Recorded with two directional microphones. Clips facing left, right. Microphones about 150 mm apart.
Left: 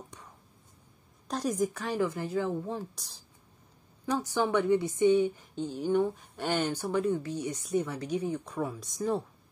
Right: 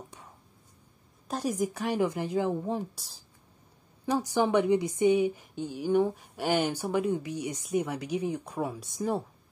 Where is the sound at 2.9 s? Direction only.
5° right (ahead or behind).